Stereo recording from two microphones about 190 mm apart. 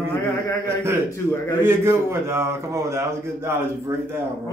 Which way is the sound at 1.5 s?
10° right (ahead or behind).